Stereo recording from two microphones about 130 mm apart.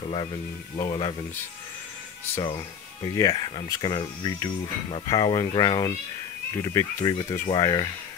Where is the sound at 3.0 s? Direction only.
30° left (ahead or behind).